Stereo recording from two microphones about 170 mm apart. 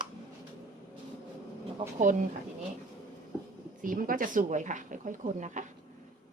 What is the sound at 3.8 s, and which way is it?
Speech, 55° right (ahead or behind).